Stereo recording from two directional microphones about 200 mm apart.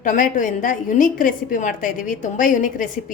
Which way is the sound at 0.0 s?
40° left (ahead or behind).